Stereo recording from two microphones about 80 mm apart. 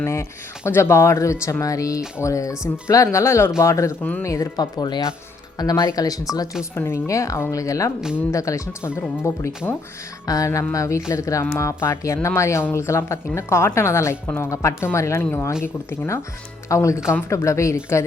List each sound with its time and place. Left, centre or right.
0.0 s speech: left
4.5 s speech: left
5.5 s speech: left
6.7 s speech: left
14.5 s speech: left
15.2 s speech: left